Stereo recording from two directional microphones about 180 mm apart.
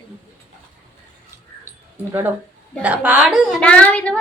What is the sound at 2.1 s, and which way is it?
A woman's voice, 10° right (ahead or behind).